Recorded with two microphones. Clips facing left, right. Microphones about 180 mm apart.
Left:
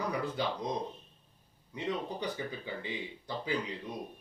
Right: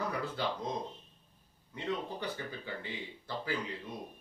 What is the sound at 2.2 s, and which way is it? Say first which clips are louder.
Speech: left 3 dB; 15° left (ahead or behind).